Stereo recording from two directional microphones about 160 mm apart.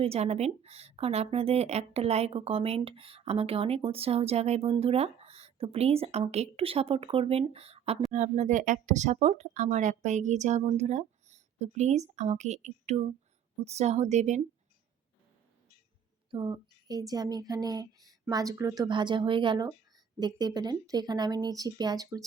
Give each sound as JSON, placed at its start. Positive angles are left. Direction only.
{"t": 0.0, "sound": "speech", "side_deg": -40}
{"t": 8.1, "sound": "speech", "side_deg": -50}
{"t": 16.3, "sound": "speech", "side_deg": -30}